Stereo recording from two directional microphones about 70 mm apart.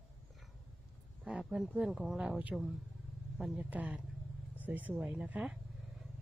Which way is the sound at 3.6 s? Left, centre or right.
Right.